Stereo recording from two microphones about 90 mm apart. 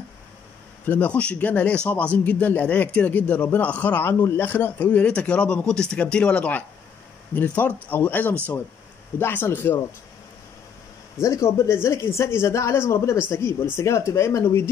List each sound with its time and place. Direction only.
0.8 s a man's voice: 15° left (ahead or behind)
11.1 s speech: 30° left (ahead or behind)